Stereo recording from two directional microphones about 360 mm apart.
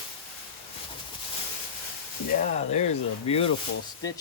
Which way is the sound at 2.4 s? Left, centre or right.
Centre.